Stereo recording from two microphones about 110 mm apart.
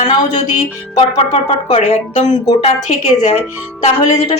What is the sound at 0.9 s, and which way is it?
Speech, 60° left (ahead or behind).